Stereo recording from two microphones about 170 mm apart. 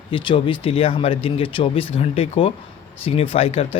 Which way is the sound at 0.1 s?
30° left (ahead or behind).